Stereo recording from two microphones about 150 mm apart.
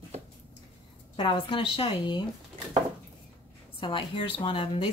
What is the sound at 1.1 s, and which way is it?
Speech, 35° left (ahead or behind).